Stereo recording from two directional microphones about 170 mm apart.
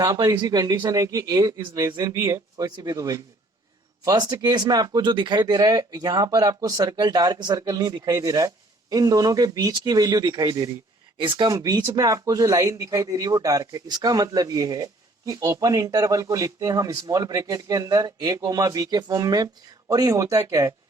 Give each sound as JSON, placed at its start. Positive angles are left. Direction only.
{"t": 0.0, "sound": "speech", "side_deg": -20}